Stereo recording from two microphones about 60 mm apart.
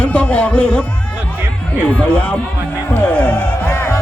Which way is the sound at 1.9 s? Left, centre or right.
Left.